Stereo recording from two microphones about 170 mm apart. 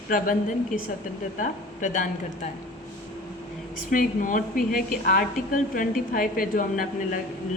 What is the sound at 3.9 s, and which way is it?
A woman's voice, 50° left (ahead or behind).